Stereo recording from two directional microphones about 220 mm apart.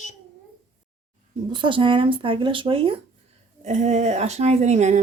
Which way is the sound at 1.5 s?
20° right (ahead or behind).